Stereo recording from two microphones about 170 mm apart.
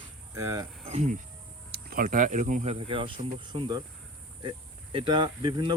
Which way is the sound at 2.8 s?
30° right (ahead or behind).